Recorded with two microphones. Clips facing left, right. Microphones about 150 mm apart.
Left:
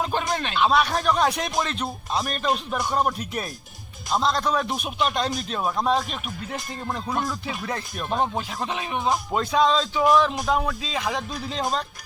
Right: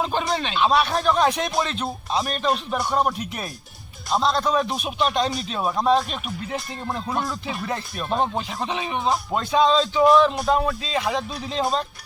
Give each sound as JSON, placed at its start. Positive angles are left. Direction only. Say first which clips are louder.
{"t": 0.0, "sound": "speech", "louder": "right 2 dB", "side_deg": 5}
{"t": 2.7, "sound": "music", "louder": "right 2 dB", "side_deg": 0}